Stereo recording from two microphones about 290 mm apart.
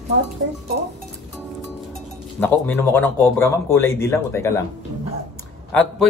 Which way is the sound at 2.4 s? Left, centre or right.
Centre.